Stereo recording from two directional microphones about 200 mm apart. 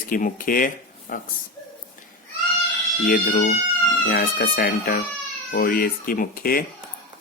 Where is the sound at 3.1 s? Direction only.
45° left (ahead or behind).